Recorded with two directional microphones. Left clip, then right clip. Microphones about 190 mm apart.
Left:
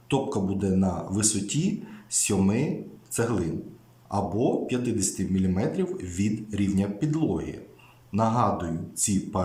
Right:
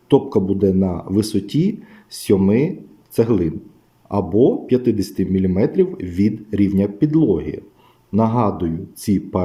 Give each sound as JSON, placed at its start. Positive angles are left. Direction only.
{"t": 0.1, "sound": "speech", "side_deg": -25}